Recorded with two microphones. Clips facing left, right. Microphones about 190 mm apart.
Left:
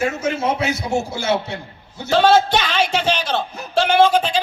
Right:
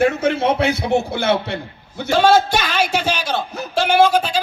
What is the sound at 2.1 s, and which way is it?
A man's voice, 10° right (ahead or behind).